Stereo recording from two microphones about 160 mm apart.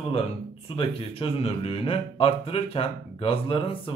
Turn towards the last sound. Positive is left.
turn(degrees=35)  # may be behind; listen again after turning